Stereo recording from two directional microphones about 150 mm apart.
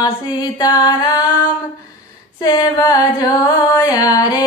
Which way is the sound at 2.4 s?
25° left (ahead or behind).